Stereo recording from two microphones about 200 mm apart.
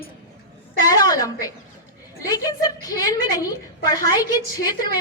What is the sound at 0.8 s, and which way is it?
A woman's voice, 20° left (ahead or behind).